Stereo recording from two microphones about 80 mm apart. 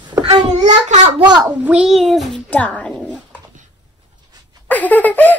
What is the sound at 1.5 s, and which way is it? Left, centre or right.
Speech, centre.